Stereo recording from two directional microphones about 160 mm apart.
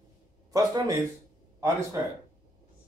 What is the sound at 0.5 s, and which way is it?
Speech, 25° right (ahead or behind).